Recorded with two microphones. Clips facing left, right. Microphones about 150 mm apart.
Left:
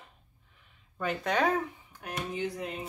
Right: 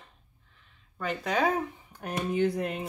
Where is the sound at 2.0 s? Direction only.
60° right (ahead or behind).